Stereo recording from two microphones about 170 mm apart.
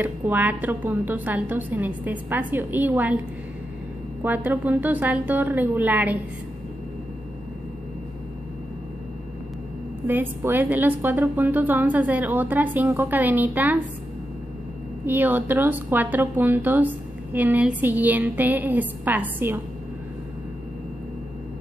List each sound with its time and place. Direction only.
0.0 s a woman's voice: 10° right (ahead or behind)
4.2 s a woman's voice: 10° right (ahead or behind)
10.0 s a woman's voice: 10° right (ahead or behind)
15.0 s a woman's voice: 10° right (ahead or behind)